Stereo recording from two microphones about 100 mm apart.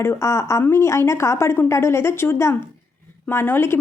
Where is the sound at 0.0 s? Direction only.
25° left (ahead or behind).